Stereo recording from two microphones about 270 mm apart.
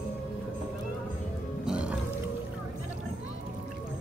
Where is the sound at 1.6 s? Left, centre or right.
Centre.